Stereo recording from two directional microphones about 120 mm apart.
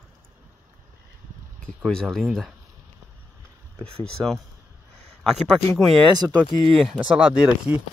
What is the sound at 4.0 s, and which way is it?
Speech, 5° left (ahead or behind).